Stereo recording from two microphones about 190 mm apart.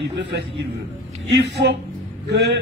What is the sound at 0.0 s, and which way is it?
A man's voice, 65° right (ahead or behind).